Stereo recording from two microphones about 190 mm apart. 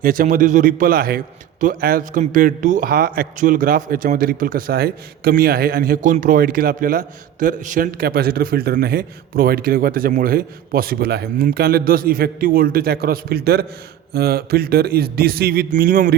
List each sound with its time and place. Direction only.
0.0 s speech: 45° right (ahead or behind)